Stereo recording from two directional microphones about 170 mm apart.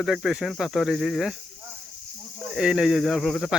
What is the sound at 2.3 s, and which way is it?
Speech, centre (ahead or behind).